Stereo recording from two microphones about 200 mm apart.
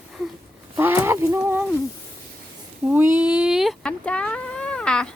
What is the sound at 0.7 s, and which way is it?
Speech, 10° right (ahead or behind).